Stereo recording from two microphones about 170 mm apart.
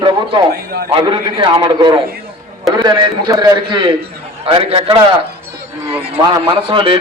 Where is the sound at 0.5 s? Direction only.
65° right (ahead or behind).